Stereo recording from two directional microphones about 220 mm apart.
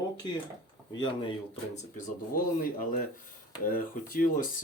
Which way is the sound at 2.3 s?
40° left (ahead or behind).